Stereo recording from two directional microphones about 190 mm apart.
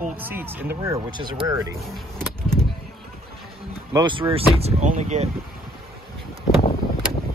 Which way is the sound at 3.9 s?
25° right (ahead or behind).